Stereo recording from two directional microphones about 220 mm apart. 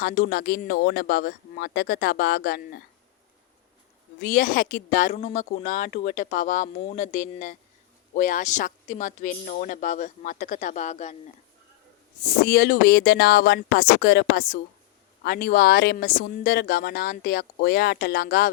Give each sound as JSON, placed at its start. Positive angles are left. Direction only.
{"t": 0.0, "sound": "speech", "side_deg": 45}
{"t": 4.2, "sound": "speech", "side_deg": 40}
{"t": 12.5, "sound": "speech", "side_deg": 45}